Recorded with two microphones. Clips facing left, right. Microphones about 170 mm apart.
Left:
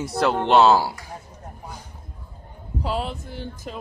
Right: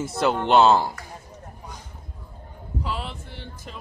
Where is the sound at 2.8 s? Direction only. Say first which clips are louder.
Left 6 dB; 40° left (ahead or behind).